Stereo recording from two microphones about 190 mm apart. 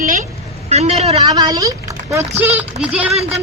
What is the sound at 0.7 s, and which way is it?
Speech, 35° right (ahead or behind).